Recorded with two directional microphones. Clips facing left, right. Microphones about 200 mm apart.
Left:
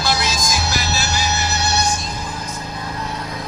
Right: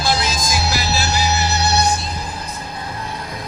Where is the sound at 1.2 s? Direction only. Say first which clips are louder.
Right 3 dB; 35° right (ahead or behind).